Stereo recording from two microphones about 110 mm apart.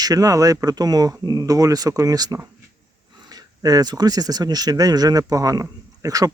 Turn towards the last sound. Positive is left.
turn(degrees=-30)  # may be behind; listen again after turning